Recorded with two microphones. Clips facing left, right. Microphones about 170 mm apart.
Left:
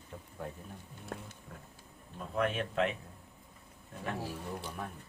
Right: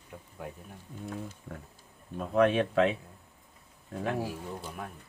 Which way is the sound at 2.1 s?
75° right (ahead or behind).